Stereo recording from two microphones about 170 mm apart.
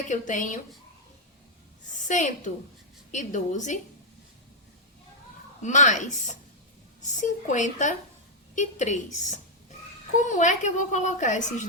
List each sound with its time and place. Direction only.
0.1 s a woman's voice: 45° left (ahead or behind)
1.9 s a woman's voice: 45° left (ahead or behind)
5.6 s a woman's voice: 45° left (ahead or behind)
10.2 s a woman's voice: 45° left (ahead or behind)